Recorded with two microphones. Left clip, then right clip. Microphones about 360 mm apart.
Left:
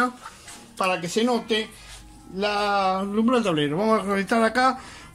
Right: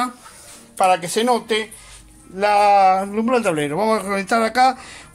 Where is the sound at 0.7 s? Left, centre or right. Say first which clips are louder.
Right 7 dB; centre.